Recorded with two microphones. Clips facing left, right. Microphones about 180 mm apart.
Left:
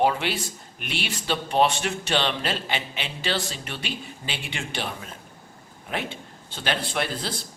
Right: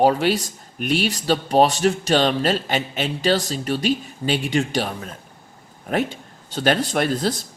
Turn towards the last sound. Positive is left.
turn(degrees=-45)  # may be behind; listen again after turning